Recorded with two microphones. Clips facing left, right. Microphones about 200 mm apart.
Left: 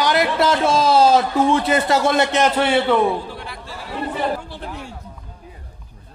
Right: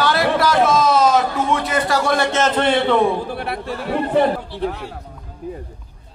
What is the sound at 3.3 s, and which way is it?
Speech, 65° right (ahead or behind).